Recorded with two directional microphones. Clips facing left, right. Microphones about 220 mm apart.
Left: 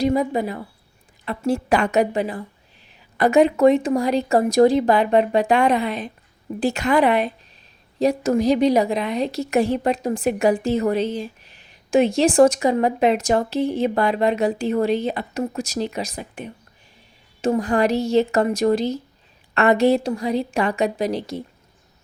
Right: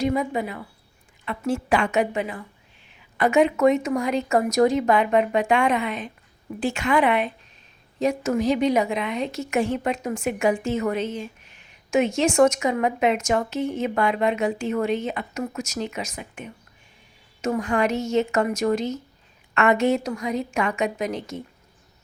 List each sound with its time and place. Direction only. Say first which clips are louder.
0.0 s a woman's voice: left 4 dB; 35° left (ahead or behind)